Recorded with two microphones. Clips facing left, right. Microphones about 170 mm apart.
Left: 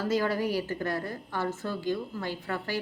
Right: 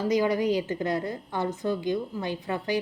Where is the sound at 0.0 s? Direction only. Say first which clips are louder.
Right 4 dB; 15° right (ahead or behind).